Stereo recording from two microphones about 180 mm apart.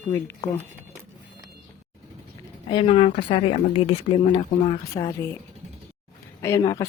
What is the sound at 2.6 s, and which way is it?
Speech, 30° left (ahead or behind).